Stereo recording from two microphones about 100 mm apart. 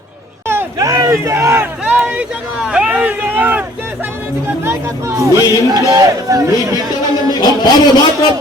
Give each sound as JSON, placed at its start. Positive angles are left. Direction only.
{"t": 0.4, "sound": "a sound", "side_deg": -25}
{"t": 0.9, "sound": "speech", "side_deg": -35}
{"t": 1.8, "sound": "speech", "side_deg": -15}
{"t": 4.6, "sound": "speech", "side_deg": -25}
{"t": 7.3, "sound": "speech", "side_deg": 45}